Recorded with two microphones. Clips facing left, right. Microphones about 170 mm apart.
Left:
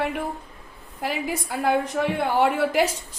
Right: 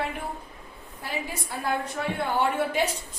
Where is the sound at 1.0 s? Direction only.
85° left.